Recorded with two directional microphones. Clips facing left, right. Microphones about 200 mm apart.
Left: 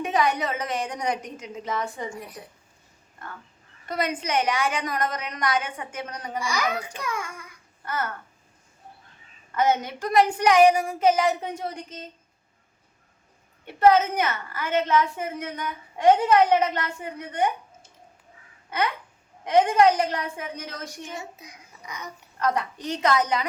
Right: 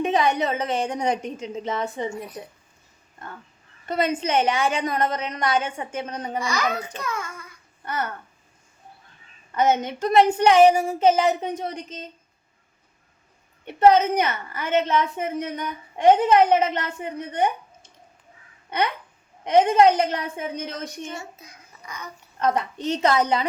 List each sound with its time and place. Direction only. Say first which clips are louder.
0.0 s a woman's voice: right 3 dB; 25° right (ahead or behind)
3.8 s a woman's voice: right 4 dB; 25° right (ahead or behind)
6.4 s a child's voice: even; 10° left (ahead or behind)
7.9 s a woman's voice: right 1 dB; 20° right (ahead or behind)
9.5 s a woman's voice: right 2 dB; 20° right (ahead or behind)
13.7 s a woman's voice: right 2 dB; 20° right (ahead or behind)
19.5 s a woman's voice: right 2 dB; 20° right (ahead or behind)
21.1 s a child's voice: right 1 dB; 15° left (ahead or behind)
22.4 s a woman's voice: right 3 dB; 25° right (ahead or behind)